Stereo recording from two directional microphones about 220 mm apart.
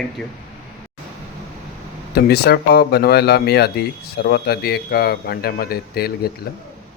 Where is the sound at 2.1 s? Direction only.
45° left (ahead or behind).